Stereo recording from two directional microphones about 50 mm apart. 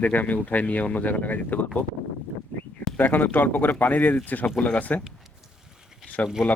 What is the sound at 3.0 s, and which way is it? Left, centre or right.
Speech, left.